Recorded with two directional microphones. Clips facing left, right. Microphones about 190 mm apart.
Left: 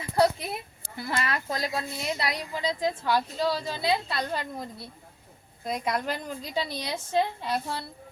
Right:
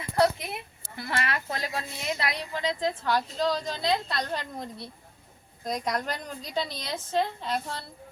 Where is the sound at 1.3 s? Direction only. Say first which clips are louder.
Left 2 dB; 40° left (ahead or behind).